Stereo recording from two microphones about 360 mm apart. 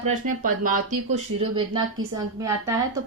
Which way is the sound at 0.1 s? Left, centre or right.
Right.